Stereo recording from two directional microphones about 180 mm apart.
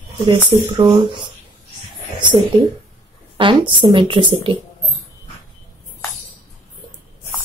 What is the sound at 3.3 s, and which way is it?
Speech, 30° right (ahead or behind).